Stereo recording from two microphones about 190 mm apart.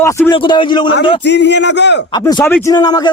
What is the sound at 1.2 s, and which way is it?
Speech, 65° left (ahead or behind).